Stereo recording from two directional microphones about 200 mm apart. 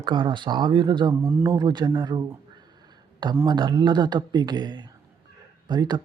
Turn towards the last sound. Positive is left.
turn(degrees=-20)  # may be behind; listen again after turning